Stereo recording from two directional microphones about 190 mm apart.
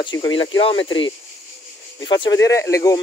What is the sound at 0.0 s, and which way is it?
Speech, 25° left (ahead or behind).